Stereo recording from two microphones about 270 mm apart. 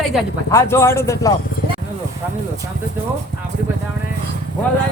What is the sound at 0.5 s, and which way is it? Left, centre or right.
Speech, centre.